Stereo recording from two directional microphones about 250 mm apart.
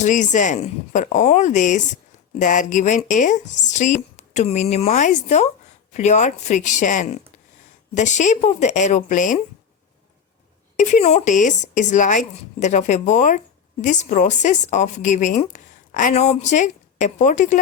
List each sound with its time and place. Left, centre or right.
0.0 s speech: left
10.8 s speech: left